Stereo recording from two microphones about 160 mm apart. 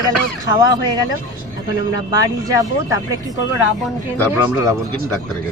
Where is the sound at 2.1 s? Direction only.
20° right (ahead or behind).